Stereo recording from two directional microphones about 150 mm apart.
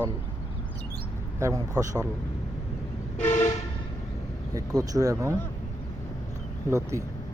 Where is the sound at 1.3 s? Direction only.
20° right (ahead or behind).